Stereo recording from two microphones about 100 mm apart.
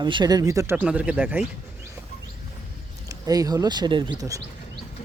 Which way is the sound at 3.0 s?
35° right (ahead or behind).